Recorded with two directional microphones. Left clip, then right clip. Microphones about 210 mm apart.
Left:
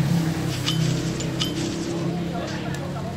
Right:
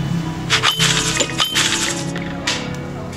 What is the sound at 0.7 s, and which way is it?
Music, 55° right (ahead or behind).